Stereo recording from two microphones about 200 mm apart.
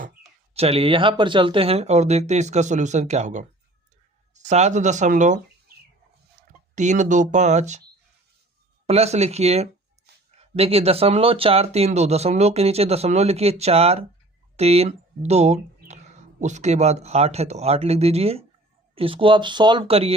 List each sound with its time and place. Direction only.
0.5 s speech: 30° right (ahead or behind)
6.7 s speech: 35° right (ahead or behind)
8.9 s speech: 30° right (ahead or behind)